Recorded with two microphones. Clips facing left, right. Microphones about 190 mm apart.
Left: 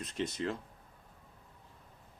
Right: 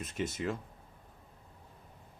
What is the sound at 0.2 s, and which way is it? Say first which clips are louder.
Speech: even; 5° right (ahead or behind).